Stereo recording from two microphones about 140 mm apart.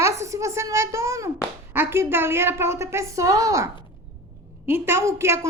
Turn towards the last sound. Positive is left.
turn(degrees=-20)  # may be behind; listen again after turning